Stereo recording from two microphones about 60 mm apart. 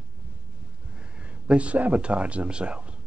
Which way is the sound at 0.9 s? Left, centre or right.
Centre.